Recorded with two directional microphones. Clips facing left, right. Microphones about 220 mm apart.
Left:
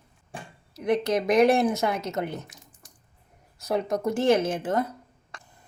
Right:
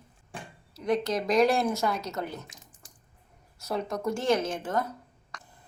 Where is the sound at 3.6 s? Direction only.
20° left (ahead or behind).